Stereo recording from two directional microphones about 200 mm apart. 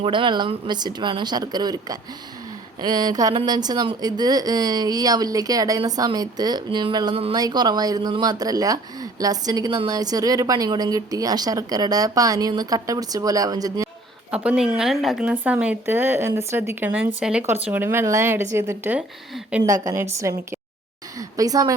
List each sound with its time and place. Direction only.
0.0 s speech: 25° right (ahead or behind)
14.3 s speech: 5° right (ahead or behind)